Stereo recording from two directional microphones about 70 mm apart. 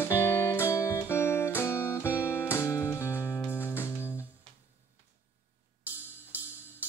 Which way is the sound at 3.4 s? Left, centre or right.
Left.